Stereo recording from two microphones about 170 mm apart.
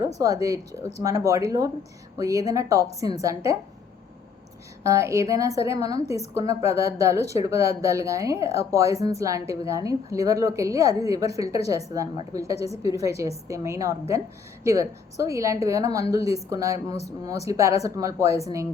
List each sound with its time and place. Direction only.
0.2 s speech: 20° right (ahead or behind)
4.8 s a woman's voice: 20° right (ahead or behind)